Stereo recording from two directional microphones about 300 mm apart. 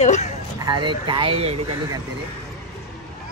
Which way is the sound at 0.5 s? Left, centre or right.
Centre.